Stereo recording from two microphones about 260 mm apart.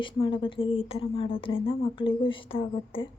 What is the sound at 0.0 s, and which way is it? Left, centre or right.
Speech, centre.